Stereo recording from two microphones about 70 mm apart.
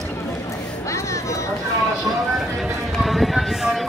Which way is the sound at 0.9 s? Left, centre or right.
Left.